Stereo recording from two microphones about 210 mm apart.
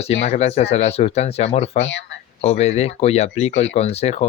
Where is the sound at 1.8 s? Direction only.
60° left (ahead or behind).